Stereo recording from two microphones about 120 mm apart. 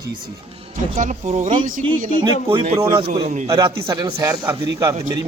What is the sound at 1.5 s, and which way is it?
Speech, 45° right (ahead or behind).